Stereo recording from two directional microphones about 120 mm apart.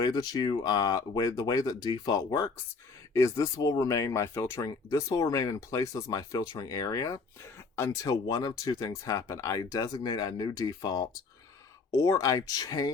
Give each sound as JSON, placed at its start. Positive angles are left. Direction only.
{"t": 0.0, "sound": "speech", "side_deg": 30}